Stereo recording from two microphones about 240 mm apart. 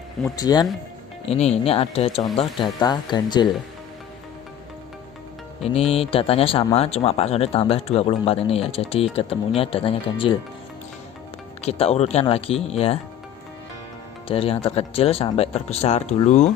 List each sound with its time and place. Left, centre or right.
0.3 s speech: centre
1.2 s speech: left
5.9 s speech: left
11.6 s speech: left
14.3 s speech: left